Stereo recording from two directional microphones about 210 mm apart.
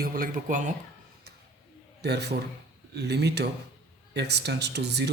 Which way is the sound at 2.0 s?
50° right (ahead or behind).